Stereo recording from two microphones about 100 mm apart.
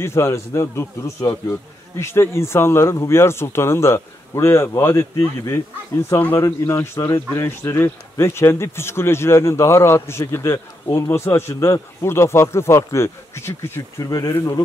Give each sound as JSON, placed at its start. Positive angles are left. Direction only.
{"t": 0.0, "sound": "speech", "side_deg": 25}
{"t": 6.4, "sound": "speech", "side_deg": 30}
{"t": 14.0, "sound": "speech", "side_deg": 35}